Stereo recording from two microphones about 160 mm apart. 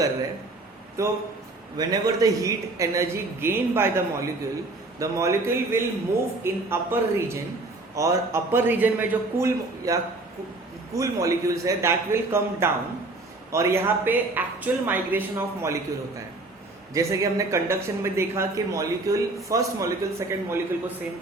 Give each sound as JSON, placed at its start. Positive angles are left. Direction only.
{"t": 1.0, "sound": "a man's voice", "side_deg": -20}
{"t": 16.9, "sound": "a man's voice", "side_deg": -20}